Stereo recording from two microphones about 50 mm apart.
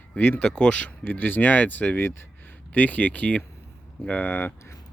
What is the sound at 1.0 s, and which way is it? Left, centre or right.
Speech, left.